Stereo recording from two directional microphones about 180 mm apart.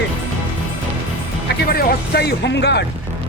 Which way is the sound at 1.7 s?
60° left (ahead or behind).